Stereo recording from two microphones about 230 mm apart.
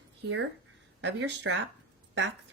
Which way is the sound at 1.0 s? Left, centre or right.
Right.